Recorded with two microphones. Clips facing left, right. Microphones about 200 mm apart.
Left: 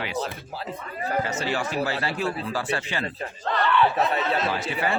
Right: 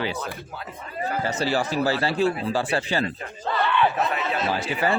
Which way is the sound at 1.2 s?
35° right (ahead or behind).